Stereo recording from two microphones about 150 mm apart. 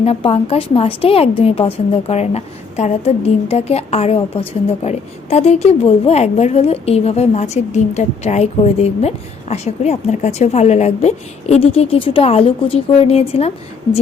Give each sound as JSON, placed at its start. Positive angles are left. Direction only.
{"t": 0.0, "sound": "a woman's voice", "side_deg": 40}